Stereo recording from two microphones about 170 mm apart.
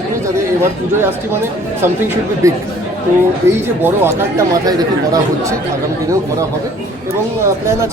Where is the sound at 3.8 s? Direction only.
15° right (ahead or behind).